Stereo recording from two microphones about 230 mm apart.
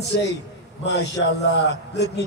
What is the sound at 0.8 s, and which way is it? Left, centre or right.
Speech, left.